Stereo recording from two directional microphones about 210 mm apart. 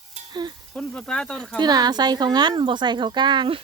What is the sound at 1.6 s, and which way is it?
Speech, 20° right (ahead or behind).